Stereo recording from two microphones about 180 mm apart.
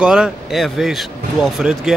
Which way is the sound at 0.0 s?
5° right (ahead or behind).